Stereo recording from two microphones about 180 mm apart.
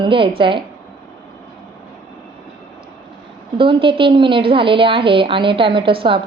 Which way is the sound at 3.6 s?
30° right (ahead or behind).